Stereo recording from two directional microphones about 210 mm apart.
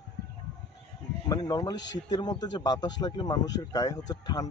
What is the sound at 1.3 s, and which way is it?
A man's voice, 20° left (ahead or behind).